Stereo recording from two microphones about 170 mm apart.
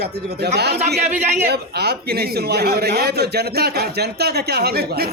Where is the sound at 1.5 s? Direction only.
70° right (ahead or behind).